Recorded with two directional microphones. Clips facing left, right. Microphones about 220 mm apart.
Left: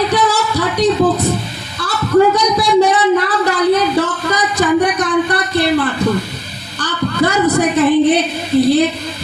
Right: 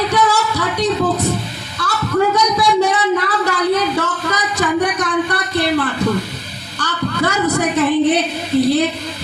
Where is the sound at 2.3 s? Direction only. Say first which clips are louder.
Left 3 dB; 35° left (ahead or behind).